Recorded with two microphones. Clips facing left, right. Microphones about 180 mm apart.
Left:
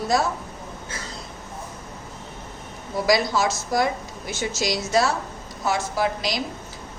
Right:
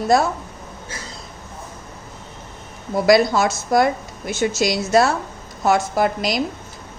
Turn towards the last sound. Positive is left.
turn(degrees=-55)  # may be behind; listen again after turning